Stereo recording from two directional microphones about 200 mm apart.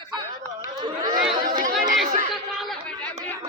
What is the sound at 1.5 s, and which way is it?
Chatter, 40° right (ahead or behind).